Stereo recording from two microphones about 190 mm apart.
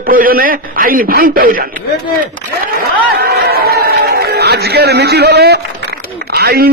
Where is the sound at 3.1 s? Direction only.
55° right (ahead or behind).